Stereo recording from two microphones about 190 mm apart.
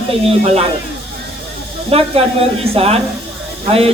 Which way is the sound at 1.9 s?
30° right (ahead or behind).